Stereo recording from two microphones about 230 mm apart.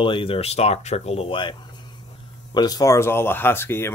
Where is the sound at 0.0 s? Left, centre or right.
Left.